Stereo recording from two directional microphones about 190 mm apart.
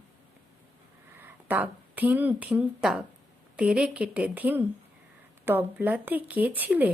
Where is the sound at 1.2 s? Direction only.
10° right (ahead or behind).